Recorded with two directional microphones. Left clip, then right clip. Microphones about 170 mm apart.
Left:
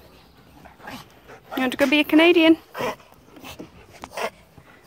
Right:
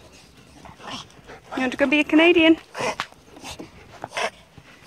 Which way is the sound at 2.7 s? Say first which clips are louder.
Right 1 dB; 25° left (ahead or behind).